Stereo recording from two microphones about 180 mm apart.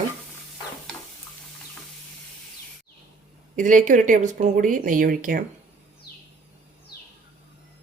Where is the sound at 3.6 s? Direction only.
45° right (ahead or behind).